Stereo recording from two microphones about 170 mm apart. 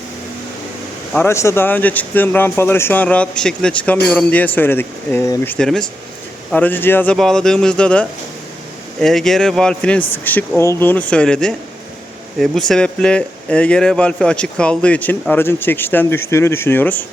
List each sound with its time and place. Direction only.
1.1 s speech: 15° left (ahead or behind)